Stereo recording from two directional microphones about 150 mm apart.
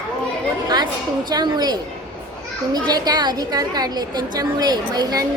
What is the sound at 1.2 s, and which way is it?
A woman's voice, 30° right (ahead or behind).